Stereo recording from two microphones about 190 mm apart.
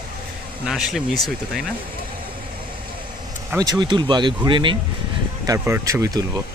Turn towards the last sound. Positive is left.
turn(degrees=-15)  # may be behind; listen again after turning